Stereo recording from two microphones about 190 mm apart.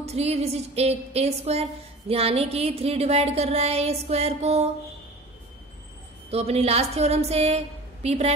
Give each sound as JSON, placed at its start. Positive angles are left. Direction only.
{"t": 0.0, "sound": "speech", "side_deg": -35}
{"t": 6.3, "sound": "speech", "side_deg": -35}